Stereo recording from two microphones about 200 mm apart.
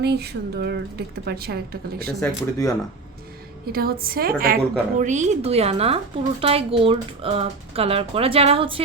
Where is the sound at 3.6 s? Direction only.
50° right (ahead or behind).